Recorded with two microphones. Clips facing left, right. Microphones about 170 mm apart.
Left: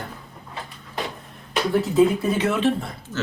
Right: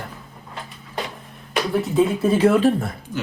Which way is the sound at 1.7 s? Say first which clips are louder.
Left 2 dB; centre (ahead or behind).